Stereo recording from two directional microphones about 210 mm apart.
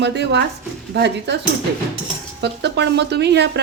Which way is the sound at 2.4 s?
55° right (ahead or behind).